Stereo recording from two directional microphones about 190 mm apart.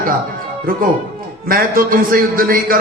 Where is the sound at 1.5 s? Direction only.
50° right (ahead or behind).